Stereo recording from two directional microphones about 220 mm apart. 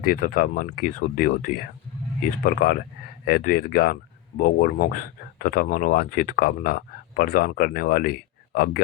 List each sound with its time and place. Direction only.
0.0 s speech: 40° left (ahead or behind)